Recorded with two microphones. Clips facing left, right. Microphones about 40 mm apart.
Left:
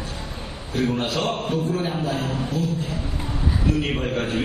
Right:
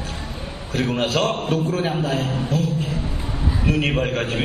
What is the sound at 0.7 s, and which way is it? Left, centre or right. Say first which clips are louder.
Speech: right 2 dB; right.